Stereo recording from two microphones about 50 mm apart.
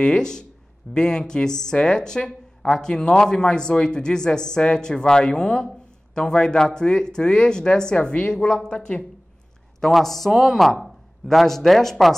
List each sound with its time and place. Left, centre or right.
0.0 s speech: centre
9.8 s speech: centre